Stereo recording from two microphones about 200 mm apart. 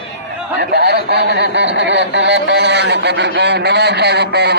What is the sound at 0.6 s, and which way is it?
A man's voice, 55° right (ahead or behind).